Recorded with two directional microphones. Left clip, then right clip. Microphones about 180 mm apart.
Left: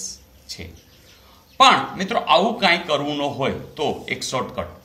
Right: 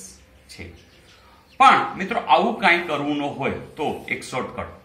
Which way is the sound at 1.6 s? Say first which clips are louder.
Even; 60° left (ahead or behind).